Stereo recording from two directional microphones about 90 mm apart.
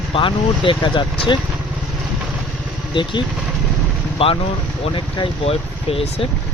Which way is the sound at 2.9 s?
65° left (ahead or behind).